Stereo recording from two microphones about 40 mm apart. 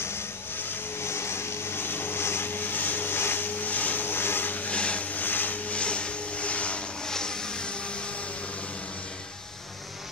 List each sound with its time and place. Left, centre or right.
0.0 s vehicle: left
3.4 s vehicle: left
4.1 s vehicle: left
4.6 s a sound: left
5.1 s vehicle: left
5.7 s vehicle: left
7.1 s vehicle: centre